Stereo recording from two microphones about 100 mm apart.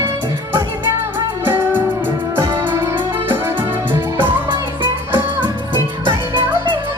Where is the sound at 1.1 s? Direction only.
20° right (ahead or behind).